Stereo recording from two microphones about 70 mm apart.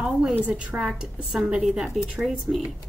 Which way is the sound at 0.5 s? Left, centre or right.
Centre.